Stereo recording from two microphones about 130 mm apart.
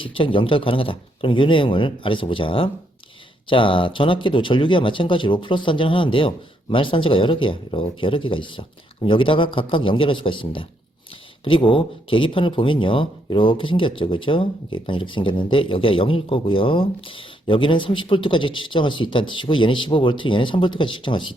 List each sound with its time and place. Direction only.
0.0 s speech: 40° left (ahead or behind)